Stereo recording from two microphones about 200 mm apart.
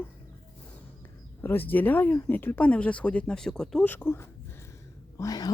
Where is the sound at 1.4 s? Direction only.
10° left (ahead or behind).